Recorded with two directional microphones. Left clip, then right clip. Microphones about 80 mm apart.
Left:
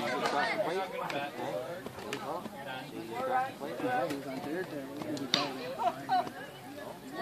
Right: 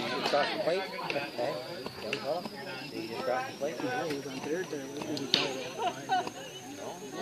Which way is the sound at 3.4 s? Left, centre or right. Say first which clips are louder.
Even; left.